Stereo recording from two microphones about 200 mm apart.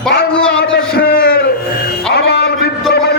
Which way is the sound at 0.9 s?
50° left (ahead or behind).